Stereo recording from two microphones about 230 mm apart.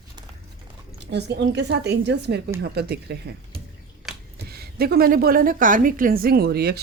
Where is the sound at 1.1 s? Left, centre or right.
Right.